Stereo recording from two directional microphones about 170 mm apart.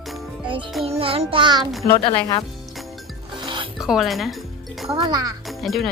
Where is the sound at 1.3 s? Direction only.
25° right (ahead or behind).